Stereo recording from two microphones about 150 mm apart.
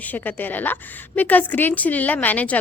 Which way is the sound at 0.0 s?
10° left (ahead or behind).